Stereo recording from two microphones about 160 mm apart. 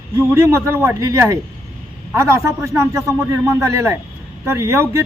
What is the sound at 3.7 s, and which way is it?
A man's voice, 15° right (ahead or behind).